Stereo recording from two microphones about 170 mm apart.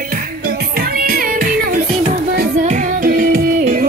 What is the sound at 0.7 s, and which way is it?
Music, 60° right (ahead or behind).